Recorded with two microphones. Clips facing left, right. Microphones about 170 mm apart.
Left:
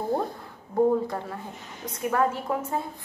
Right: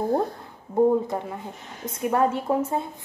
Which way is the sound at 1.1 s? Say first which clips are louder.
Right 3 dB; 15° right (ahead or behind).